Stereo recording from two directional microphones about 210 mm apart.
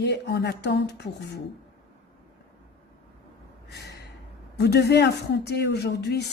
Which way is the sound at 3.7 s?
50° left (ahead or behind).